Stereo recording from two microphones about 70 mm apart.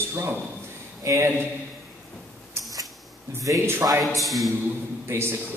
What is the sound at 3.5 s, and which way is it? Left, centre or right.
Speech, right.